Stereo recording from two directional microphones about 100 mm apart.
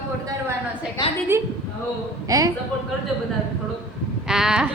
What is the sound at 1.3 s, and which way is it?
Speech, 25° right (ahead or behind).